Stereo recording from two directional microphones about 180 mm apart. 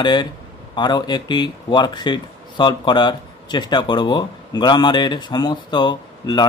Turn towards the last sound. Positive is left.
turn(degrees=25)  # may be behind; listen again after turning